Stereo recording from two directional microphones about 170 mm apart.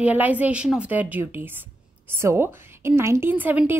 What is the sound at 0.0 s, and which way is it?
A woman's voice, 10° right (ahead or behind).